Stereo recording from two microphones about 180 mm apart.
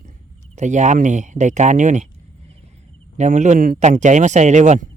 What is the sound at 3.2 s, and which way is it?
A man's voice, 40° right (ahead or behind).